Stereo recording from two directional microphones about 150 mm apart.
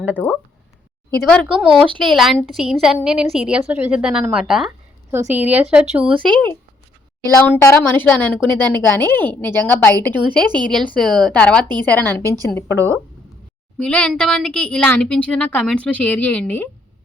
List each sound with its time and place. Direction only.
0.0 s a woman's voice: 10° right (ahead or behind)
1.2 s a woman's voice: 5° left (ahead or behind)
5.1 s a woman's voice: 15° right (ahead or behind)
6.3 s a woman's voice: 10° left (ahead or behind)
10.4 s a woman's voice: 30° right (ahead or behind)
10.7 s a woman's voice: 5° left (ahead or behind)
12.7 s a woman's voice: 15° right (ahead or behind)
13.7 s a woman's voice: 10° left (ahead or behind)